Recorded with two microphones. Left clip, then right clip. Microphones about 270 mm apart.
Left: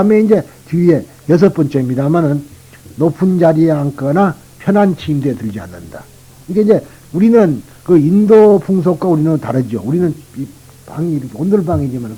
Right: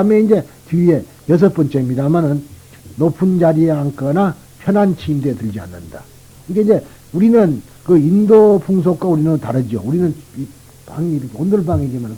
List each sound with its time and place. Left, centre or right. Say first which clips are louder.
0.0 s speech: left 2 dB; right
3.0 s a man's voice: left 2 dB; right
4.7 s speech: left 2 dB; right
10.8 s speech: left 2 dB; right